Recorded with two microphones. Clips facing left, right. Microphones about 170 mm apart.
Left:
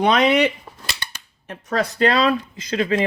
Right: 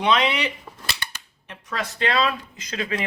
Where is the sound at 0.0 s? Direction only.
45° left (ahead or behind).